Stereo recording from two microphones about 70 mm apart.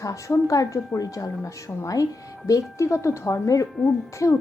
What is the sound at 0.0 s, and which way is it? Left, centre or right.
A woman's voice, left.